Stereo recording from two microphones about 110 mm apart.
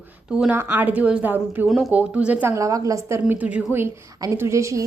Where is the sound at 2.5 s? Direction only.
30° right (ahead or behind).